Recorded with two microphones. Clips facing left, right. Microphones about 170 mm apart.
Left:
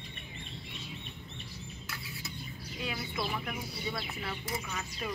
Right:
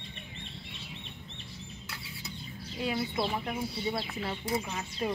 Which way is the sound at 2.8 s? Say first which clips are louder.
Right 6 dB; 30° right (ahead or behind).